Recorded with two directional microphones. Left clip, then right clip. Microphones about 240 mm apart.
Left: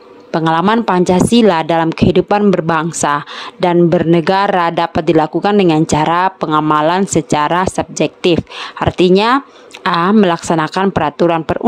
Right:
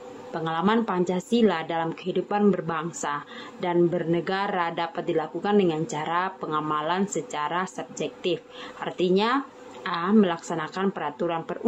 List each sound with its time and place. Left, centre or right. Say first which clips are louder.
0.3 s a woman's voice: left 13 dB; left